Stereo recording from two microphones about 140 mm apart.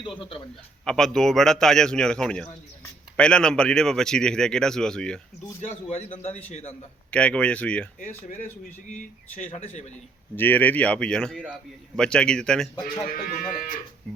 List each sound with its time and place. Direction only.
0.0 s a man's voice: 35° left (ahead or behind)
0.9 s speech: 5° left (ahead or behind)
5.5 s a man's voice: 50° left (ahead or behind)
7.1 s speech: 10° left (ahead or behind)
8.9 s a man's voice: 60° left (ahead or behind)
10.3 s speech: 15° left (ahead or behind)
13.1 s speech: 90° left